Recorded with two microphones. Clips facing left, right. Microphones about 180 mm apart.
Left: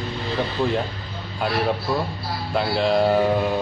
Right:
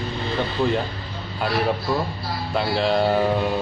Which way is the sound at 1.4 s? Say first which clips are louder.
Even; centre (ahead or behind).